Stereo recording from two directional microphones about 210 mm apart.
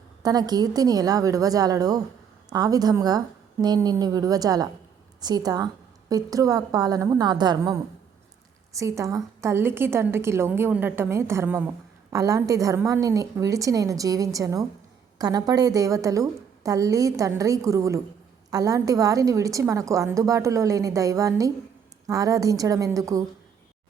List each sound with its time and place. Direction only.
0.2 s a woman's voice: 20° right (ahead or behind)